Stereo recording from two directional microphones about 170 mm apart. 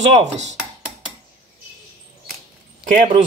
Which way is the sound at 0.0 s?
40° right (ahead or behind).